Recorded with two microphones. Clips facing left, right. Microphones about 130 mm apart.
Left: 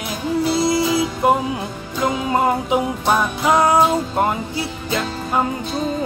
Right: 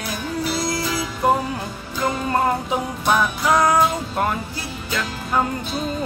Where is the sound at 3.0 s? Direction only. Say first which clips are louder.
Right 1 dB; 25° left (ahead or behind).